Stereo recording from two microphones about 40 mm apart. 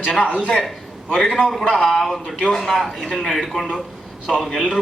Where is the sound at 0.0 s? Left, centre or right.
Left; by 3.8 s centre.